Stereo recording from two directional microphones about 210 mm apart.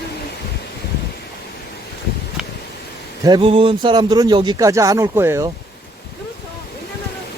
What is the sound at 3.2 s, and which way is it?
Speech, 25° right (ahead or behind).